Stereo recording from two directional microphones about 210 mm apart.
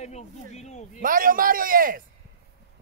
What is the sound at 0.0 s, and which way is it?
Speech, 30° left (ahead or behind).